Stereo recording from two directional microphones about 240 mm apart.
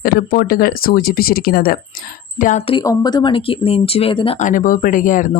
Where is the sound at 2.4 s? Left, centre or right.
Left.